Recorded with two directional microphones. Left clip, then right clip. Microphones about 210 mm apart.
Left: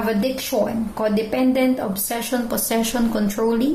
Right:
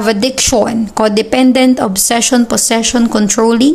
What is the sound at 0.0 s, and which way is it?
A woman's voice, 45° right (ahead or behind).